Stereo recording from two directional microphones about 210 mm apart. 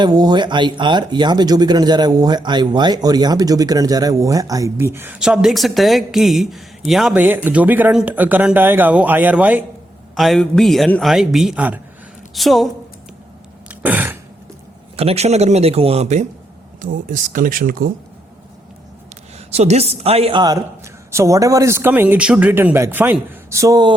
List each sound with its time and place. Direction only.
0.0 s a man's voice: 20° right (ahead or behind); by 12.7 s centre (ahead or behind)
13.7 s throat clearing: 10° right (ahead or behind)
14.9 s speech: 30° right (ahead or behind)
19.5 s speech: 30° right (ahead or behind)